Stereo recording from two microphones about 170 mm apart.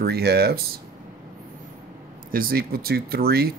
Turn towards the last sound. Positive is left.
turn(degrees=-65)  # may be behind; listen again after turning